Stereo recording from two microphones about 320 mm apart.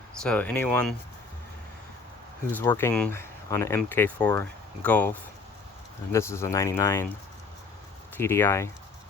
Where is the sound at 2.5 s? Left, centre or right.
Centre.